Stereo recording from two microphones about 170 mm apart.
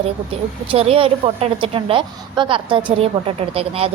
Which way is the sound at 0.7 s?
35° right (ahead or behind).